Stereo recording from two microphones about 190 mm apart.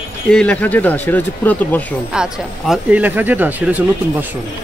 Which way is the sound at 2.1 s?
Centre (ahead or behind).